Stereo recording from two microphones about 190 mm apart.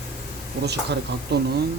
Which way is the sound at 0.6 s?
60° right (ahead or behind).